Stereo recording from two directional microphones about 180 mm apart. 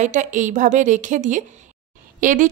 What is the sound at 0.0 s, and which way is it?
Speech, 45° right (ahead or behind).